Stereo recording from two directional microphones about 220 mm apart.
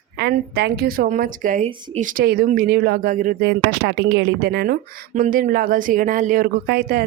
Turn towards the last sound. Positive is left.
turn(degrees=-40)  # may be behind; listen again after turning